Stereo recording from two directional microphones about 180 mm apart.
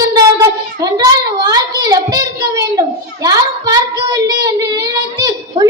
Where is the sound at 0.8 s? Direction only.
20° right (ahead or behind).